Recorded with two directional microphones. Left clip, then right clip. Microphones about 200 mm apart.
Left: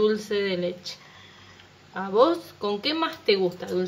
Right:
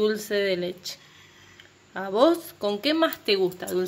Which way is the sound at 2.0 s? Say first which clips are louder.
Even; 35° right (ahead or behind).